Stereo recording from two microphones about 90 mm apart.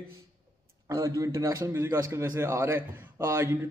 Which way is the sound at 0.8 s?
35° right (ahead or behind).